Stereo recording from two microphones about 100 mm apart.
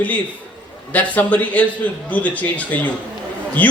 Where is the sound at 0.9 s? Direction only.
15° left (ahead or behind).